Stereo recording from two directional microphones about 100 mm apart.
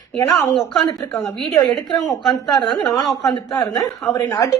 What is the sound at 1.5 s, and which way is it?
A woman's voice, 40° left (ahead or behind).